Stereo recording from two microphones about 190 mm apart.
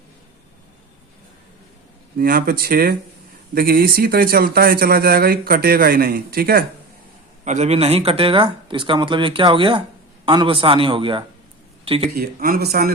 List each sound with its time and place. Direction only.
2.1 s speech: 50° right (ahead or behind)
7.4 s speech: 40° right (ahead or behind)
12.1 s speech: 50° right (ahead or behind)